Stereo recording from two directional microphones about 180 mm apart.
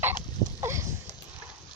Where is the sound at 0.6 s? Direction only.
15° right (ahead or behind).